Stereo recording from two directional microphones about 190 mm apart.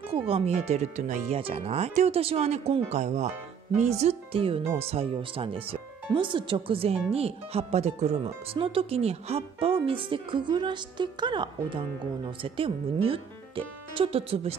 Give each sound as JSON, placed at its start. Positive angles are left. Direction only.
{"t": 0.1, "sound": "speech", "side_deg": -30}